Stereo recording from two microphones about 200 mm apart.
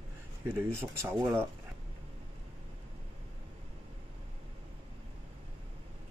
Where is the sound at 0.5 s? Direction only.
10° right (ahead or behind).